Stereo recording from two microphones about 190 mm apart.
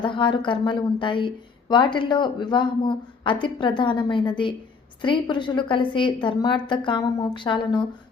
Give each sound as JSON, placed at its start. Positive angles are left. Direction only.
{"t": 0.0, "sound": "a woman's voice", "side_deg": 25}